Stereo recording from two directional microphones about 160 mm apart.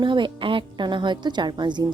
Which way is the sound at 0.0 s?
30° right (ahead or behind).